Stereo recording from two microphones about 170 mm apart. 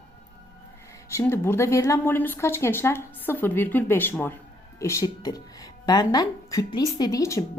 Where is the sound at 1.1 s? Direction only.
15° left (ahead or behind).